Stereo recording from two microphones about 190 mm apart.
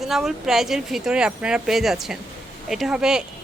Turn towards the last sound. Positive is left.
turn(degrees=-5)  # may be behind; listen again after turning